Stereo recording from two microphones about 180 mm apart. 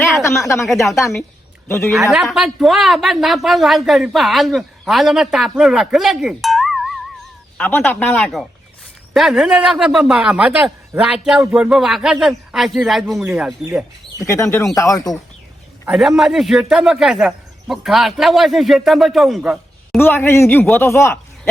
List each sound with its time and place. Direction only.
0.2 s speech: 15° left (ahead or behind)
0.7 s speech: centre (ahead or behind)
1.6 s a man's voice: 15° left (ahead or behind)
2.0 s speech: centre (ahead or behind)
7.6 s speech: 10° left (ahead or behind)
9.1 s speech: centre (ahead or behind)
14.2 s speech: 15° left (ahead or behind)
15.9 s speech: centre (ahead or behind)
20.0 s speech: 10° left (ahead or behind)